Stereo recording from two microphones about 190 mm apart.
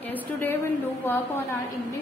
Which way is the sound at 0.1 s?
10° left (ahead or behind).